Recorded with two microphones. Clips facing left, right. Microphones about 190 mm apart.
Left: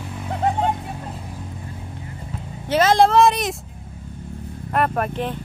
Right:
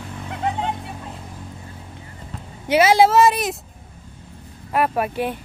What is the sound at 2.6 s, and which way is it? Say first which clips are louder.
Speech: right 1 dB; 10° right (ahead or behind).